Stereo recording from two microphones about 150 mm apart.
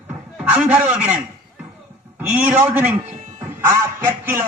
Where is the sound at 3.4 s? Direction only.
15° right (ahead or behind).